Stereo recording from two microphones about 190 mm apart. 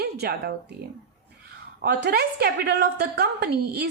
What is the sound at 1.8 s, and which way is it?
A woman's voice, 60° right (ahead or behind).